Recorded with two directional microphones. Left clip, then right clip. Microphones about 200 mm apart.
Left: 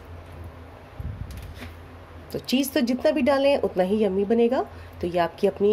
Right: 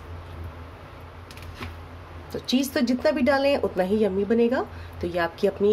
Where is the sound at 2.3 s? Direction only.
15° left (ahead or behind).